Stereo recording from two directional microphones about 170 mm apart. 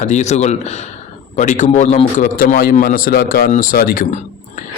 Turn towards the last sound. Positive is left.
turn(degrees=55)  # may be behind; listen again after turning